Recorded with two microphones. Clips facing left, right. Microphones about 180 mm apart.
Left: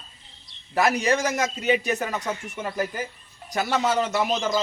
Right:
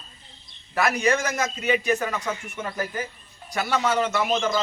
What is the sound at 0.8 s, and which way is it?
Speech, 35° left (ahead or behind).